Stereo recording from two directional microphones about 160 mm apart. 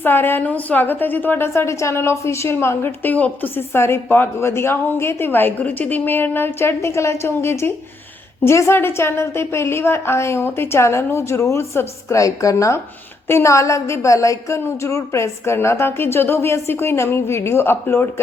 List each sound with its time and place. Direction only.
0.0 s a woman's voice: 15° left (ahead or behind)